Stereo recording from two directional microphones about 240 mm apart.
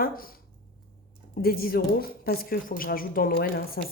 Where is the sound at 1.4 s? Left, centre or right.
Left.